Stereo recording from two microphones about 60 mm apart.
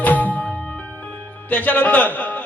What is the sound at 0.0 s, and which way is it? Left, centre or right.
Music, left.